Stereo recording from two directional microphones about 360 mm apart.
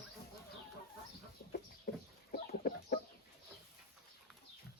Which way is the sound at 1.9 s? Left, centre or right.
Left.